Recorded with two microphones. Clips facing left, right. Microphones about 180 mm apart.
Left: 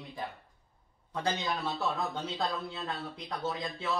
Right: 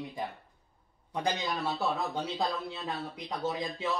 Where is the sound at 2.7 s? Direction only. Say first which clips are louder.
Right 1 dB; 15° right (ahead or behind).